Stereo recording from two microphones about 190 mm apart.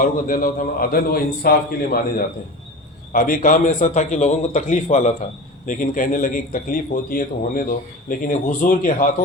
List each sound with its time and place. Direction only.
0.0 s a man's voice: 45° left (ahead or behind)